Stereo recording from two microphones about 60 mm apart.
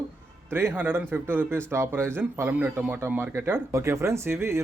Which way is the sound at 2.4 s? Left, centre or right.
Right.